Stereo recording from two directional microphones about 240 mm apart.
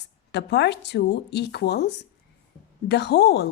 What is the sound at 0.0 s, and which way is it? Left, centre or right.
Speech, left.